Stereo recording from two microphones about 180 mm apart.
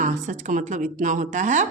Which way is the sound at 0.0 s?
45° right (ahead or behind).